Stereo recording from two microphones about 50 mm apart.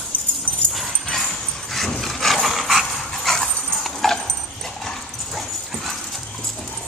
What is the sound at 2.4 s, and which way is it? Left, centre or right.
Dog, centre.